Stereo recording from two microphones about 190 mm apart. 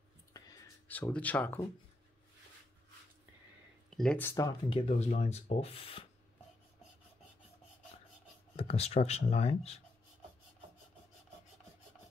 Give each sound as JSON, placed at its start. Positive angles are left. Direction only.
{"t": 0.3, "sound": "a sound", "side_deg": 15}
{"t": 3.9, "sound": "speech", "side_deg": 5}
{"t": 8.5, "sound": "speech", "side_deg": 30}